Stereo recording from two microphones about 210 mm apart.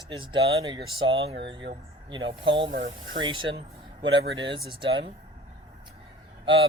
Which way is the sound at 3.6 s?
25° right (ahead or behind).